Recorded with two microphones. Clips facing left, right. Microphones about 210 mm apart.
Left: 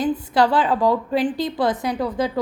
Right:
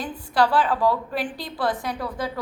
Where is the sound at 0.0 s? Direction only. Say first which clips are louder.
Left 4 dB; 20° left (ahead or behind).